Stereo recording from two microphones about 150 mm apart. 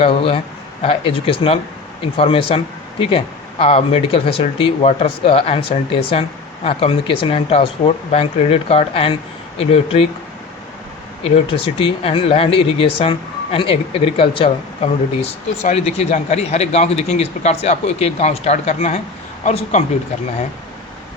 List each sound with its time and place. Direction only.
0.0 s speech: 35° left (ahead or behind)
11.2 s speech: 40° left (ahead or behind)